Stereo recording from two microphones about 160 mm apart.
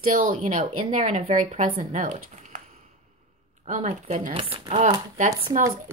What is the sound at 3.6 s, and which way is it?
Speech, 45° right (ahead or behind).